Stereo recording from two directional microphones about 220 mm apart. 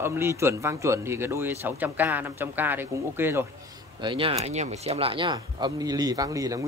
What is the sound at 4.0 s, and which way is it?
A man's voice, 25° right (ahead or behind).